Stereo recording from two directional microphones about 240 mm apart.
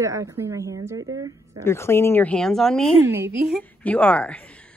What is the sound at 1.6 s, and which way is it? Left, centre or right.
A woman's voice, centre.